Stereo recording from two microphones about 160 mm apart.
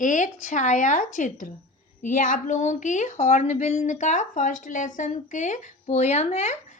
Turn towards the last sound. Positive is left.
turn(degrees=45)  # may be behind; listen again after turning